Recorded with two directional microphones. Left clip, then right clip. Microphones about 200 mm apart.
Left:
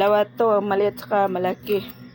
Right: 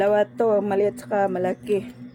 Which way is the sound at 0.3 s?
25° left (ahead or behind).